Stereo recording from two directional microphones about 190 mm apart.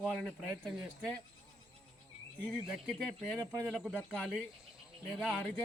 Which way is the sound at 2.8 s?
5° left (ahead or behind).